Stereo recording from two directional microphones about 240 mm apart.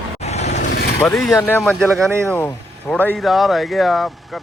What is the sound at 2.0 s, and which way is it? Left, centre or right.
Speech, centre.